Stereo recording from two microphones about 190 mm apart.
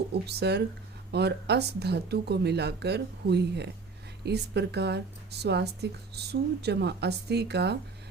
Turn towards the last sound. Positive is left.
turn(degrees=-60)  # may be behind; listen again after turning